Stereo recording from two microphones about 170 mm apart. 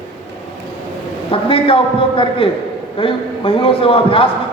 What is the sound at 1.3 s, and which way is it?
A man's voice, 30° left (ahead or behind).